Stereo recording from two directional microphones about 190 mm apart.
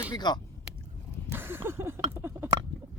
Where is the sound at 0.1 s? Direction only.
20° left (ahead or behind).